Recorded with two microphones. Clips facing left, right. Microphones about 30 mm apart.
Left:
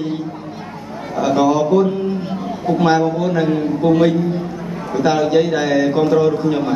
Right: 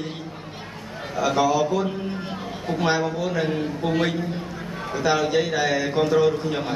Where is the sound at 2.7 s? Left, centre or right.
Centre.